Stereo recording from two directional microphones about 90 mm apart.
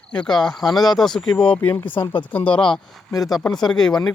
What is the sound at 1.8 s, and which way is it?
Speech, 70° left (ahead or behind).